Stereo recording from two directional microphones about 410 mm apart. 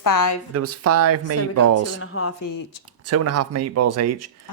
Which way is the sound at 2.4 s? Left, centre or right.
Left.